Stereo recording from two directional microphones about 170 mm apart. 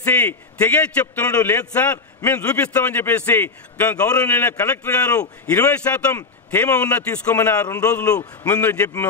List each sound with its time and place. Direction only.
0.0 s a man's voice: 10° left (ahead or behind)
7.6 s a man's voice: 20° left (ahead or behind)
8.5 s a man's voice: 10° left (ahead or behind)